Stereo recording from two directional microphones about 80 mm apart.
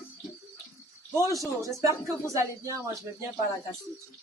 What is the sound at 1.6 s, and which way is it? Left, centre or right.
Speech, right.